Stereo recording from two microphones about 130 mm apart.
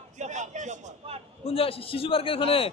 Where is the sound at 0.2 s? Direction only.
65° right (ahead or behind).